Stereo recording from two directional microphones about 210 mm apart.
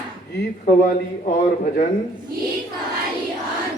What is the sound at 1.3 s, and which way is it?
Speech, 40° left (ahead or behind).